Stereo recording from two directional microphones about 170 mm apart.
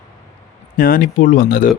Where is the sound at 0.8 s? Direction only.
55° left (ahead or behind).